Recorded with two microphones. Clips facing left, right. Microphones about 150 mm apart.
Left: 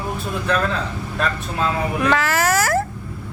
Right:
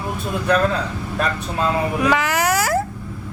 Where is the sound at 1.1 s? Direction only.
10° right (ahead or behind).